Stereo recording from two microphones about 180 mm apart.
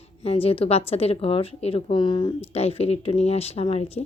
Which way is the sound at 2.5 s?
35° left (ahead or behind).